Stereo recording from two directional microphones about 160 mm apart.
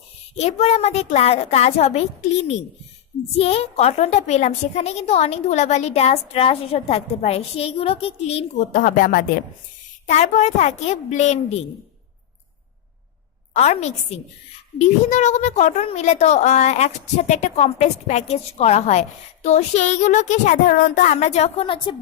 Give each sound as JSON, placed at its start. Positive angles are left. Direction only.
{"t": 0.3, "sound": "a woman's voice", "side_deg": 40}
{"t": 3.3, "sound": "a woman's voice", "side_deg": 40}
{"t": 8.7, "sound": "speech", "side_deg": 60}
{"t": 10.1, "sound": "a woman's voice", "side_deg": 45}
{"t": 13.5, "sound": "a woman's voice", "side_deg": 40}
{"t": 21.2, "sound": "speech", "side_deg": 45}